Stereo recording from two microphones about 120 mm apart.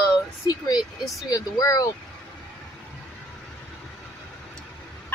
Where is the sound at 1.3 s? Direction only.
35° left (ahead or behind).